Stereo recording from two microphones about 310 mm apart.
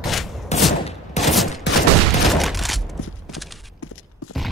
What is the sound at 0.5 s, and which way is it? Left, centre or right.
Fusillade, left.